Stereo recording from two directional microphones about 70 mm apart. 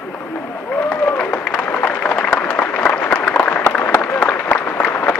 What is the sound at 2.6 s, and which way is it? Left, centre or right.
Applause, left.